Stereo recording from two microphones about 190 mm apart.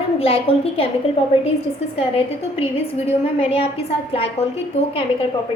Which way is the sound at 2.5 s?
30° left (ahead or behind).